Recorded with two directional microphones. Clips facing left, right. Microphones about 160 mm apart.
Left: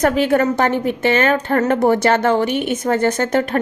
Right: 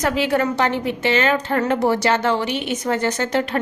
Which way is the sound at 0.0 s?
50° left (ahead or behind).